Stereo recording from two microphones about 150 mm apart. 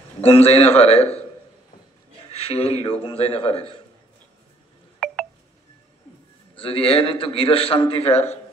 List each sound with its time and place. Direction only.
0.2 s a man's voice: 40° left (ahead or behind)
2.3 s a man's voice: 40° left (ahead or behind)
5.0 s telephone dialing: centre (ahead or behind)
6.5 s a man's voice: 35° left (ahead or behind)